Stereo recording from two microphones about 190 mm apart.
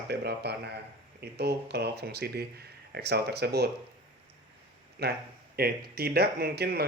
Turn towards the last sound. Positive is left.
turn(degrees=-55)  # may be behind; listen again after turning